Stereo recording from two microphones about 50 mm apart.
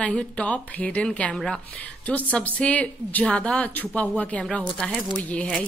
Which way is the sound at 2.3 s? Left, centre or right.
Left.